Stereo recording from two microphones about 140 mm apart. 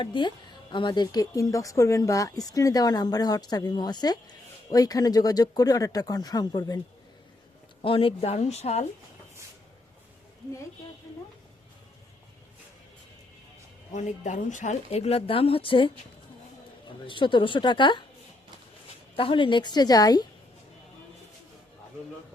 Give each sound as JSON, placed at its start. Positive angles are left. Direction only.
{"t": 0.0, "sound": "speech", "side_deg": 35}
{"t": 7.8, "sound": "a woman's voice", "side_deg": 40}
{"t": 13.9, "sound": "a woman's voice", "side_deg": 60}
{"t": 17.1, "sound": "a woman's voice", "side_deg": 35}
{"t": 19.1, "sound": "a woman's voice", "side_deg": 40}